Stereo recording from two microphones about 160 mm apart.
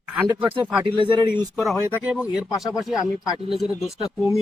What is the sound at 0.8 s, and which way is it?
Speech, 30° right (ahead or behind).